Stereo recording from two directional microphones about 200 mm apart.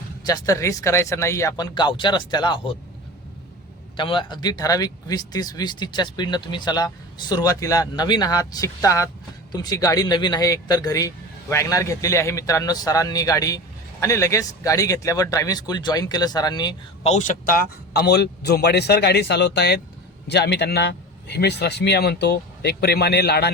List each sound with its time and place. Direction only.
0.3 s speech: 20° left (ahead or behind)
3.9 s speech: 25° left (ahead or behind)
17.1 s a man's voice: 40° left (ahead or behind); by 23.5 s 55° left (ahead or behind)